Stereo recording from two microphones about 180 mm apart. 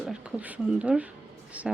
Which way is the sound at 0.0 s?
5° right (ahead or behind).